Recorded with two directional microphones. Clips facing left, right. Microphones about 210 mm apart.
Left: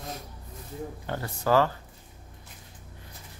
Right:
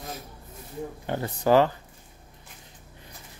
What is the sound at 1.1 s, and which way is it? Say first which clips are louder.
Speech: right 4 dB; 20° right (ahead or behind).